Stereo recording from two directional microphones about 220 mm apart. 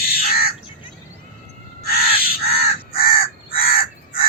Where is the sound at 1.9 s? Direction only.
45° left (ahead or behind).